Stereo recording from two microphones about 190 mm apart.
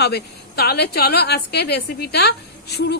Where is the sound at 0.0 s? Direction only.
55° left (ahead or behind).